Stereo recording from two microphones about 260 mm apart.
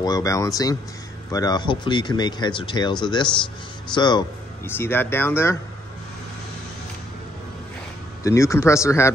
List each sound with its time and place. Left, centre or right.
0.0 s speech: centre
8.2 s speech: centre